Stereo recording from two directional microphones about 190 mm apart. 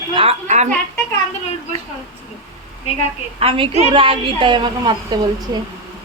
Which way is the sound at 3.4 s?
30° right (ahead or behind).